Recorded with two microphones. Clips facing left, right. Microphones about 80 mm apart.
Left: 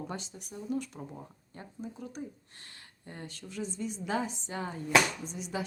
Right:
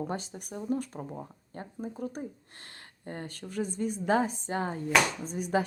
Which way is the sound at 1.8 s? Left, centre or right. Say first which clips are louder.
Right 4 dB; right.